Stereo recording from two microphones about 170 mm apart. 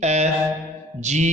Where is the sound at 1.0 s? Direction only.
40° right (ahead or behind).